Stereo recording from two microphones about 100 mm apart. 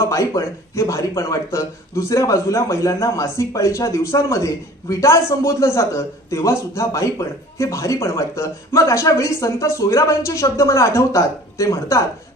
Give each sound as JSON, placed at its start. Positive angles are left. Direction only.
{"t": 0.0, "sound": "speech", "side_deg": 30}